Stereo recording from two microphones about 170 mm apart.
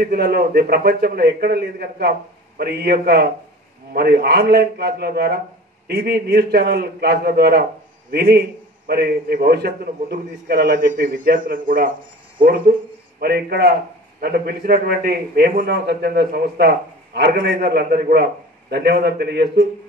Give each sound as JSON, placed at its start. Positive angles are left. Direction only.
{"t": 0.0, "sound": "a man's voice", "side_deg": -65}
{"t": 13.2, "sound": "a man's voice", "side_deg": -65}